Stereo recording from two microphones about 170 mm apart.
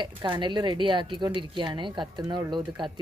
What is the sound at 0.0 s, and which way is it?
A woman's voice, 25° right (ahead or behind).